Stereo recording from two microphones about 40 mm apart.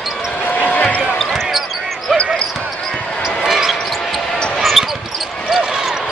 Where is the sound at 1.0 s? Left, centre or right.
Centre.